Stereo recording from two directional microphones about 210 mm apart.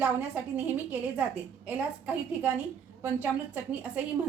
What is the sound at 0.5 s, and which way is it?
Speech, 5° right (ahead or behind).